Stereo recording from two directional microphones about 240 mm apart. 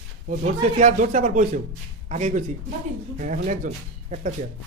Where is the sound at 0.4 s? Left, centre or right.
Right.